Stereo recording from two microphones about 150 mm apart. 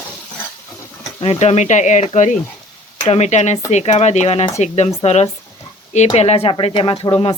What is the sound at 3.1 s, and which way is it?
Speech, 50° left (ahead or behind).